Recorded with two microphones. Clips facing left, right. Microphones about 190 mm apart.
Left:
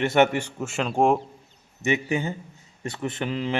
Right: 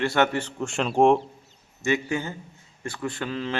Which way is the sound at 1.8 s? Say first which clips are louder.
Left 1 dB; 20° left (ahead or behind).